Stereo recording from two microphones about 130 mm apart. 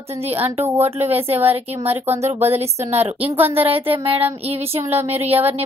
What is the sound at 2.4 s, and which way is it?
A woman's voice, 55° right (ahead or behind).